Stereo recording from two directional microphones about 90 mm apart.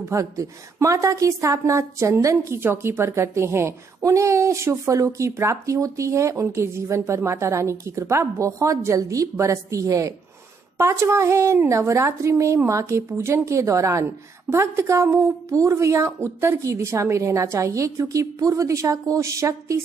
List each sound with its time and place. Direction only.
0.0 s a woman's voice: 35° right (ahead or behind)